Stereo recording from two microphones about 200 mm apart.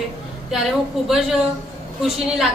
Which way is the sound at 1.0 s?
Centre (ahead or behind).